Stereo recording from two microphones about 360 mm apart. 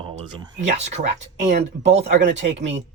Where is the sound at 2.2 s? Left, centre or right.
Right.